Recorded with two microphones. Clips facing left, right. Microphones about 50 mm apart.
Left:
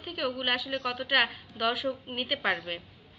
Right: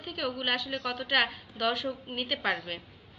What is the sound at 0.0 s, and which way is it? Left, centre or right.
A woman's voice, centre.